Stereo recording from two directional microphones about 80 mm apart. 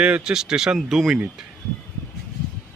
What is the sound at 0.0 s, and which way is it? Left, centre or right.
Speech, centre.